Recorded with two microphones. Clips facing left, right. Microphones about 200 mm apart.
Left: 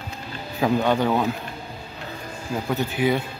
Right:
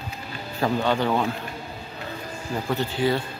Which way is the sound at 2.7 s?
15° left (ahead or behind).